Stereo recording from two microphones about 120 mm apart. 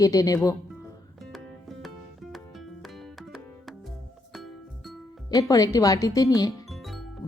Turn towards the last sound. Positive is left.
turn(degrees=30)  # may be behind; listen again after turning